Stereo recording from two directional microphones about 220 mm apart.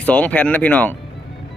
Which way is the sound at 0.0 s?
5° left (ahead or behind).